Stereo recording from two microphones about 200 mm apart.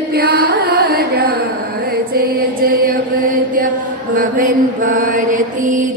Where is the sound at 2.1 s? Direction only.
45° right (ahead or behind).